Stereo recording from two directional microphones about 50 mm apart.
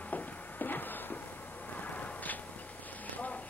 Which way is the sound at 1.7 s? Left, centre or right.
Left.